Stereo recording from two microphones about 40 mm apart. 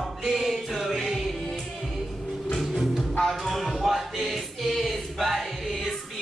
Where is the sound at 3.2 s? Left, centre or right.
Centre.